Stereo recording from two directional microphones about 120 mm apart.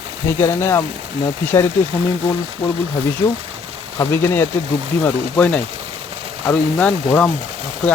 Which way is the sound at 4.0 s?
25° left (ahead or behind).